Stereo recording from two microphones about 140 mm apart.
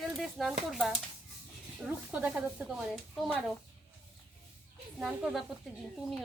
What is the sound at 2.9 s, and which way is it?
Speech, centre (ahead or behind).